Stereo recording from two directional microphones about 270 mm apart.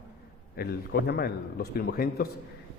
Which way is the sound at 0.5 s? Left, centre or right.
Left.